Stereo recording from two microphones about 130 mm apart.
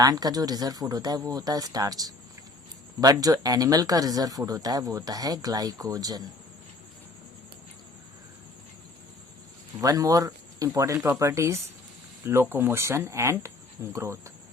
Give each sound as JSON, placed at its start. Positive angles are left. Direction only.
{"t": 0.0, "sound": "speech", "side_deg": -30}
{"t": 9.8, "sound": "speech", "side_deg": -25}